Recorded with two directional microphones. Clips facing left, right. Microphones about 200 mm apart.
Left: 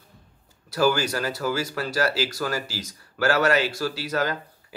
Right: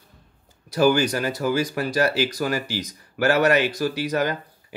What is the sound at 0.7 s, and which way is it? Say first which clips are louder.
Speech: right 4 dB; 20° right (ahead or behind).